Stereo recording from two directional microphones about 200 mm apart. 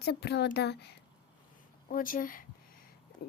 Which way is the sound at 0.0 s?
55° left (ahead or behind).